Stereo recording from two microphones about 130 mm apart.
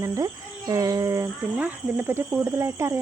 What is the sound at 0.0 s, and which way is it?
Speech, 25° right (ahead or behind).